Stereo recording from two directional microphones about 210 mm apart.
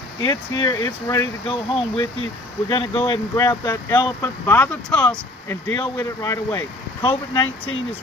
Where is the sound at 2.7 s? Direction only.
20° left (ahead or behind).